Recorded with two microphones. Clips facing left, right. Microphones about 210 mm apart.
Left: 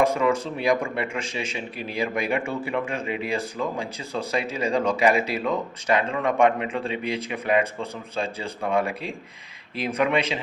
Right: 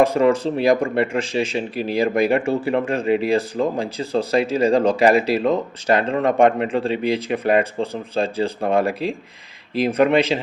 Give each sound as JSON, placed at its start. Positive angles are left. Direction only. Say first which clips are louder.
{"t": 0.1, "sound": "speech", "louder": "right 6 dB", "side_deg": -35}